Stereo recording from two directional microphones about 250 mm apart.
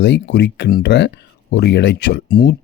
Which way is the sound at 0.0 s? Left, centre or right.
Left.